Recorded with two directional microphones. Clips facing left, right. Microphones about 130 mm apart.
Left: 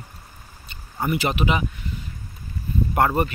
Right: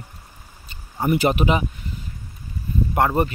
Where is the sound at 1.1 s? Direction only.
45° right (ahead or behind).